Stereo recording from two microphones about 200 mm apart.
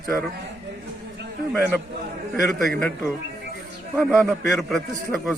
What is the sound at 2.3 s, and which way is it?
Speech, centre (ahead or behind).